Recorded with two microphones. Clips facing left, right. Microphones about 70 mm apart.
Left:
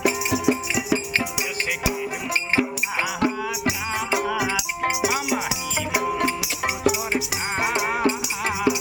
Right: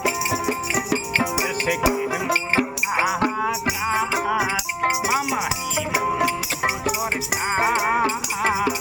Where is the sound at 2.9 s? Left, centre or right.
Right.